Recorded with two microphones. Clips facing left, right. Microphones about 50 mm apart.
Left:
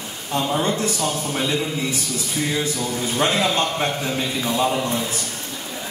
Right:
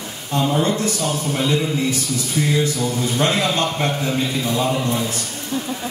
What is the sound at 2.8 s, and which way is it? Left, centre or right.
A man's voice, centre.